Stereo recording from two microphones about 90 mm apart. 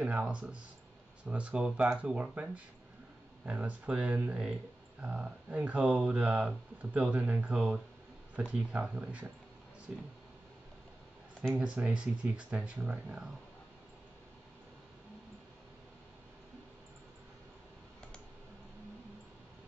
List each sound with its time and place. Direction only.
0.0 s speech: 10° right (ahead or behind)
11.5 s speech: 10° right (ahead or behind)